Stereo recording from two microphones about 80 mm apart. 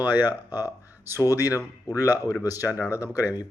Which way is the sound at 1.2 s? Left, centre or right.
Left.